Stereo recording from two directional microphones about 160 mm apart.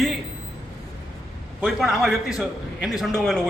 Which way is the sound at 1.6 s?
Centre (ahead or behind).